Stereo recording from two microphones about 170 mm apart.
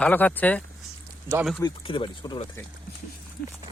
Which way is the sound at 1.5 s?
25° left (ahead or behind).